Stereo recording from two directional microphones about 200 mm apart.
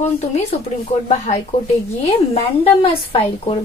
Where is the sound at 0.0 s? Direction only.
35° left (ahead or behind).